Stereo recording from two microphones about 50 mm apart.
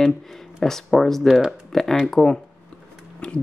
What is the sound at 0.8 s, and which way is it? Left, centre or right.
Speech, centre.